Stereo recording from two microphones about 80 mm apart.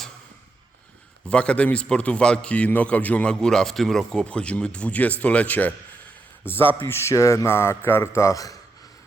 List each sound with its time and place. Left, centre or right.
1.3 s a man's voice: centre; by 8.5 s left